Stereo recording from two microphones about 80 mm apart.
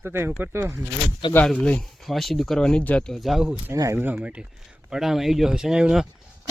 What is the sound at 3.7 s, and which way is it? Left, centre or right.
Speech, right.